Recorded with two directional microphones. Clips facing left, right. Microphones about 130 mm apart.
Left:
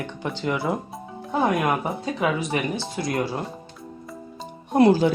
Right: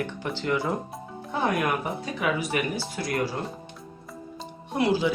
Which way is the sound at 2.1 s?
25° left (ahead or behind).